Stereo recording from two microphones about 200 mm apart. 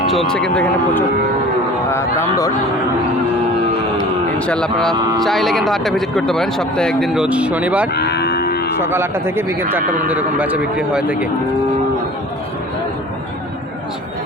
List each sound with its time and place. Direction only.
0.1 s speech: centre (ahead or behind)
4.4 s speech: 5° left (ahead or behind)
7.9 s livestock: 55° left (ahead or behind)
8.8 s speech: 10° right (ahead or behind)